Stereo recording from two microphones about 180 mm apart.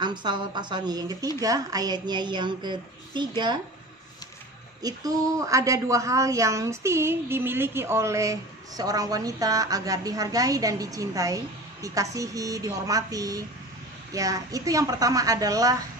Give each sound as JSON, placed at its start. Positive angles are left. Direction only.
{"t": 0.0, "sound": "a woman's voice", "side_deg": -25}
{"t": 4.8, "sound": "a woman's voice", "side_deg": -20}